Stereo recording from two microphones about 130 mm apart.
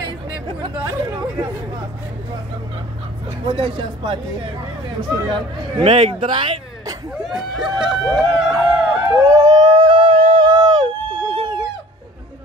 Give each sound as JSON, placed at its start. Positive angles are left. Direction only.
{"t": 0.8, "sound": "speech", "side_deg": -25}
{"t": 3.4, "sound": "a man's voice", "side_deg": -45}
{"t": 5.8, "sound": "a man's voice", "side_deg": -45}
{"t": 7.2, "sound": "speech", "side_deg": -5}
{"t": 9.1, "sound": "howl", "side_deg": -25}
{"t": 10.3, "sound": "a sound", "side_deg": -35}